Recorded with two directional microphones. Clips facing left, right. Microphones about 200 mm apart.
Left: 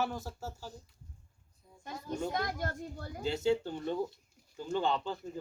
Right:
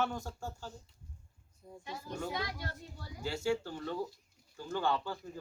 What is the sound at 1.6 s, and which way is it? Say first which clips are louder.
Speech: right 9 dB; 45° right (ahead or behind).